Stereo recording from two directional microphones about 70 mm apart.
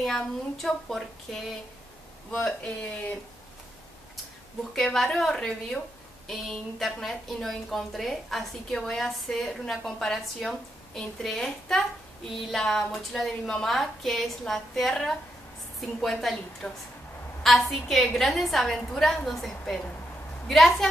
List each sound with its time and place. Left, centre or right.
0.0 s a woman's voice: centre
2.3 s a woman's voice: centre
4.7 s a woman's voice: centre